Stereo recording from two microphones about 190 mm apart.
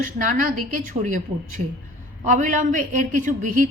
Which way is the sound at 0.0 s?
45° right (ahead or behind).